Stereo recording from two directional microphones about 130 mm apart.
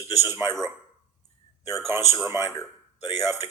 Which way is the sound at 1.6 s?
20° right (ahead or behind).